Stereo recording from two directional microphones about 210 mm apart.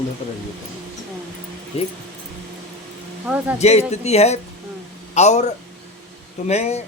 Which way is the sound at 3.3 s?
5° right (ahead or behind).